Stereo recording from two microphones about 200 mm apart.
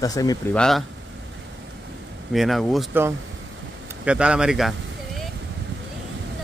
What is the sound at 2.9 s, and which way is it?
Speech, 10° right (ahead or behind).